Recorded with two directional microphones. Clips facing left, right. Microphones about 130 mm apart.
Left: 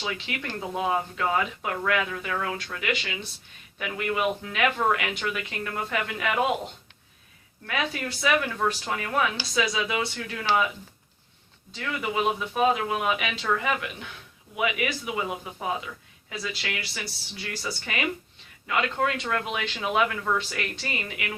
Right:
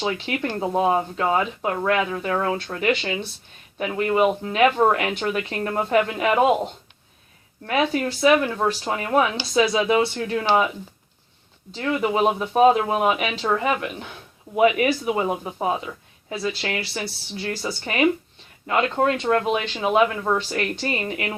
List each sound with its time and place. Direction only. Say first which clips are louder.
0.0 s speech: right 8 dB; 35° right (ahead or behind)
7.7 s speech: right 8 dB; 30° right (ahead or behind)
11.7 s speech: right 7 dB; 35° right (ahead or behind)